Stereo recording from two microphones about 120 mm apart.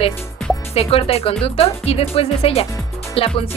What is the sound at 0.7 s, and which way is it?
Speech, 50° left (ahead or behind).